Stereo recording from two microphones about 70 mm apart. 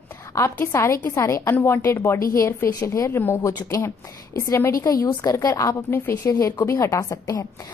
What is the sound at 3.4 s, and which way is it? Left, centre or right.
Speech, left.